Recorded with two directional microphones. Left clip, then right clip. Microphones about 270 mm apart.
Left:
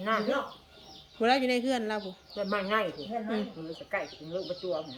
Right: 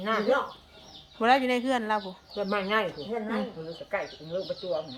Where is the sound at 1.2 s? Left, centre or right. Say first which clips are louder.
Right 3 dB; centre.